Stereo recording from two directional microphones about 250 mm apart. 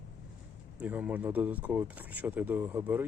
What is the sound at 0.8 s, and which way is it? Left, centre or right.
Speech, centre.